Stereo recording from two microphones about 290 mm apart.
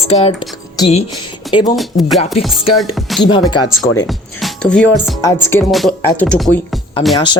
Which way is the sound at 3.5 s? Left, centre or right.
Centre.